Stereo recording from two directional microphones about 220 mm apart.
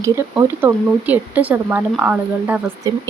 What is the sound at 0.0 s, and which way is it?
Speech, 15° right (ahead or behind).